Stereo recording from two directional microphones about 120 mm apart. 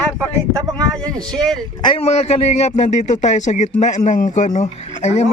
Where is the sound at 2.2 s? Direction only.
65° left (ahead or behind).